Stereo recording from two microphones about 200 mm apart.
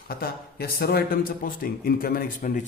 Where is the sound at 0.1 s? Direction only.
50° left (ahead or behind).